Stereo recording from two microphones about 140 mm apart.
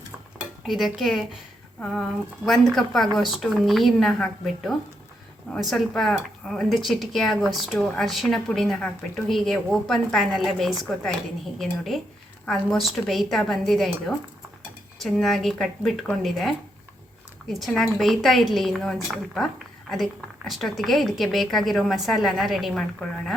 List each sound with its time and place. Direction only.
0.7 s a woman's voice: centre (ahead or behind)